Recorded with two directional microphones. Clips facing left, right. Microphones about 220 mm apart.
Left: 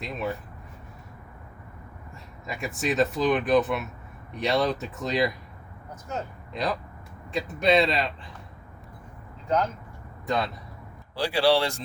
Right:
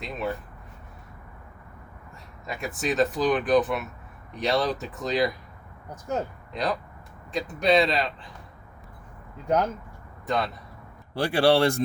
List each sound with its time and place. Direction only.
0.0 s speech: centre (ahead or behind)
2.5 s speech: centre (ahead or behind)
6.5 s speech: centre (ahead or behind)
10.2 s speech: centre (ahead or behind)
11.1 s speech: 55° right (ahead or behind)